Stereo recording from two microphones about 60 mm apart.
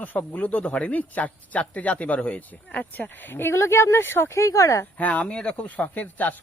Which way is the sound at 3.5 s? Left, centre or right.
Left.